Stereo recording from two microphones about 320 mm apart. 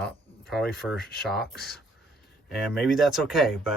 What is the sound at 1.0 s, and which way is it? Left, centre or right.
Speech, left.